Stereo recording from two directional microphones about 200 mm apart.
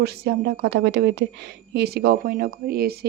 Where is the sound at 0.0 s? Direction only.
50° right (ahead or behind).